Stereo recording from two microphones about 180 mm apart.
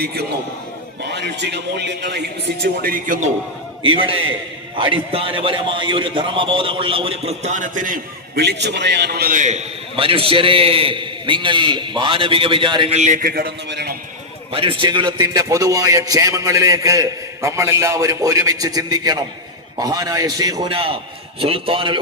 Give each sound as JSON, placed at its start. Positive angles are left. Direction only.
{"t": 0.0, "sound": "a man's voice", "side_deg": -65}
{"t": 3.8, "sound": "a man's voice", "side_deg": -30}
{"t": 8.4, "sound": "a man's voice", "side_deg": -70}
{"t": 14.5, "sound": "a man's voice", "side_deg": -30}